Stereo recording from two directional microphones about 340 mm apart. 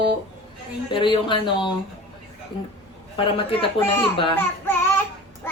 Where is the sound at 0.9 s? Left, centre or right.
Centre.